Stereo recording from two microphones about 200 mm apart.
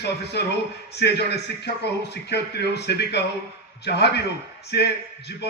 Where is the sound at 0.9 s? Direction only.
55° left (ahead or behind).